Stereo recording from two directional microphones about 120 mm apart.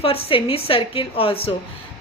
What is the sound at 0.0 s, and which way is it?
A woman's voice, 50° left (ahead or behind).